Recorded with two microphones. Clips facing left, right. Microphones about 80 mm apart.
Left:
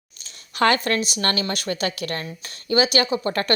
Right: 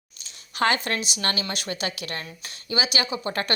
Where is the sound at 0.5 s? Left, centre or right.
Left.